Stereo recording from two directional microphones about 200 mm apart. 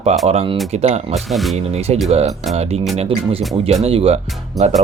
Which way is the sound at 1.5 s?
30° right (ahead or behind).